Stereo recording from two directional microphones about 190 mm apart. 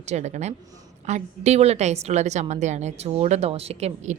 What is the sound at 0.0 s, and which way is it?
A woman's voice, 35° right (ahead or behind).